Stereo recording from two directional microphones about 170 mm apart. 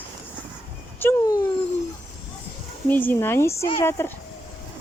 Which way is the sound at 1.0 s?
20° left (ahead or behind).